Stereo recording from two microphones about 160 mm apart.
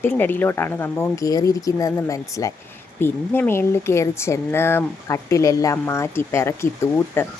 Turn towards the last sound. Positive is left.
turn(degrees=15)  # may be behind; listen again after turning